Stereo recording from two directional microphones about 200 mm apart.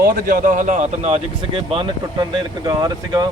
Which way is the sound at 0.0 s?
45° right (ahead or behind).